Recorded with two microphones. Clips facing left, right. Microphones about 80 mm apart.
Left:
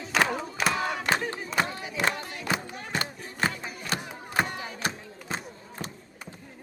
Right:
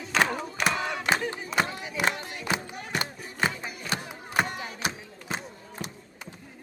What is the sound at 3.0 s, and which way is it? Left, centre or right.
Music, centre.